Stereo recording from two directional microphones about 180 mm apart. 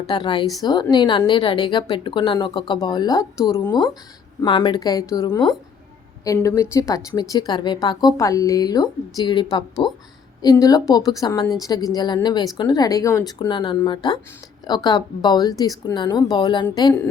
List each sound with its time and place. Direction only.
0.1 s a woman's voice: 25° left (ahead or behind)